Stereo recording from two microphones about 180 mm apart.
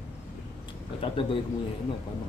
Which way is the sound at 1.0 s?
30° left (ahead or behind).